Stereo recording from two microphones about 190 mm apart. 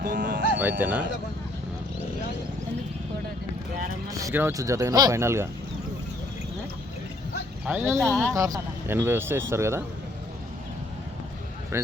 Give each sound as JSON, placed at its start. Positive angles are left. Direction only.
{"t": 0.0, "sound": "speech", "side_deg": -50}
{"t": 0.5, "sound": "speech", "side_deg": -10}
{"t": 4.2, "sound": "speech", "side_deg": -15}
{"t": 7.6, "sound": "speech", "side_deg": -5}
{"t": 8.3, "sound": "speech", "side_deg": -20}
{"t": 11.7, "sound": "speech", "side_deg": -15}